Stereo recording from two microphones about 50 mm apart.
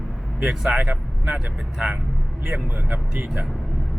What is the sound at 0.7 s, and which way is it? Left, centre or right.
Speech, right.